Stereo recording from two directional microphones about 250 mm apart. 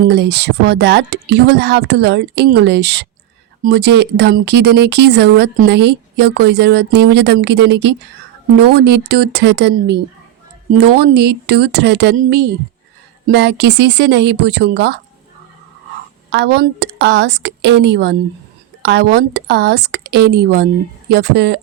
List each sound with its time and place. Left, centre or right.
0.0 s a woman's voice: right
16.3 s a woman's voice: right